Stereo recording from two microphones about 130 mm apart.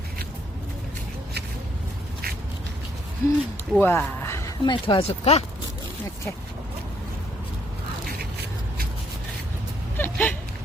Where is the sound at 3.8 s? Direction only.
15° left (ahead or behind).